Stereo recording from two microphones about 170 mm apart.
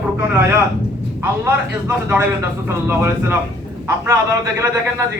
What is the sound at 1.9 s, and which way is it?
A man's voice, 15° right (ahead or behind).